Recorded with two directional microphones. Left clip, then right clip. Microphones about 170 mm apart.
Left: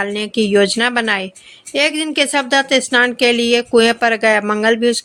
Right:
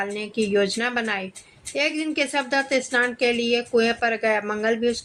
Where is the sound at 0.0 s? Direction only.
40° left (ahead or behind).